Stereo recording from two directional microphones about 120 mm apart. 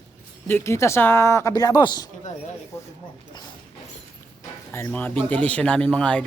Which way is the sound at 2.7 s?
20° left (ahead or behind).